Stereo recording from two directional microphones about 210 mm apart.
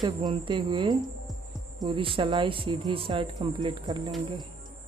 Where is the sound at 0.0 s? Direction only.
20° right (ahead or behind).